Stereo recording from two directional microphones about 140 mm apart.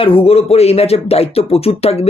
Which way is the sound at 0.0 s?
40° left (ahead or behind).